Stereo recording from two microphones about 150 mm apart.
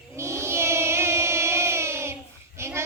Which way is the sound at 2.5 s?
15° right (ahead or behind).